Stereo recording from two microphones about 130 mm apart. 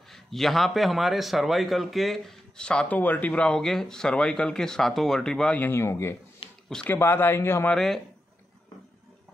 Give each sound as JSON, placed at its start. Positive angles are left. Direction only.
{"t": 0.1, "sound": "a man's voice", "side_deg": 0}
{"t": 6.7, "sound": "speech", "side_deg": 5}
{"t": 7.0, "sound": "a man's voice", "side_deg": 15}
{"t": 7.7, "sound": "a man's voice", "side_deg": 5}